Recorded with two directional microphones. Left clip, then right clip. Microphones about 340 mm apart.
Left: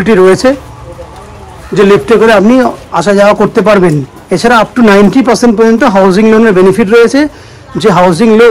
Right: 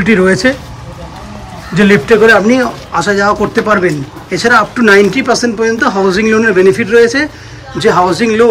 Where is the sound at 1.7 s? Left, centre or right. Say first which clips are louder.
Left 3 dB; centre.